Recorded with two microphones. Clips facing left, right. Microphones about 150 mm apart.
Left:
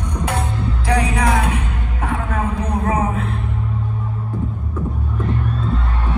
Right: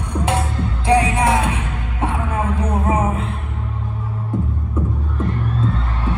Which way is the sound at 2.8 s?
25° right (ahead or behind).